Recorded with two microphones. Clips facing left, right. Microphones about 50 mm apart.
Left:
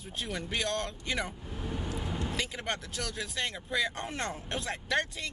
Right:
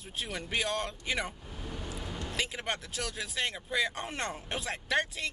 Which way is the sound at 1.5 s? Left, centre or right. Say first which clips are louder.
Left 4 dB; centre.